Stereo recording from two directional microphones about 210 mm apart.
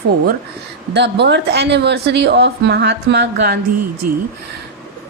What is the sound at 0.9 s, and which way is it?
A woman's voice, 55° right (ahead or behind).